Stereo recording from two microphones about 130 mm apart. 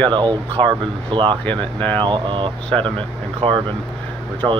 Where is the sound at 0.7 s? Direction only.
40° right (ahead or behind).